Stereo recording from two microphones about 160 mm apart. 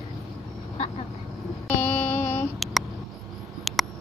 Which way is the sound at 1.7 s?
15° left (ahead or behind).